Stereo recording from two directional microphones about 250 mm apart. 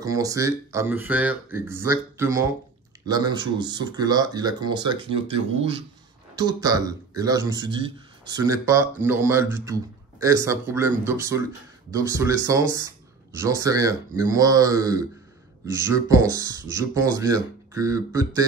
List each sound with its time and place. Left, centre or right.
0.0 s a man's voice: centre